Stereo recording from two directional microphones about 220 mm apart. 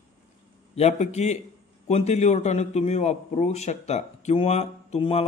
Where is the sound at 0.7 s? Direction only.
30° left (ahead or behind).